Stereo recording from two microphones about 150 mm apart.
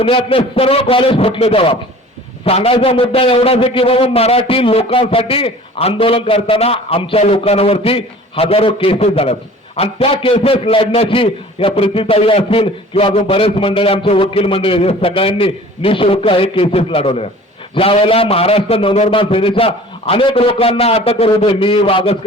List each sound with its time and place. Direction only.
0.0 s a man's voice: 35° left (ahead or behind)